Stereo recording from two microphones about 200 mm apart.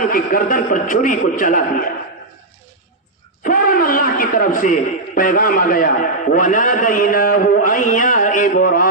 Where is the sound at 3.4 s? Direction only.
45° left (ahead or behind).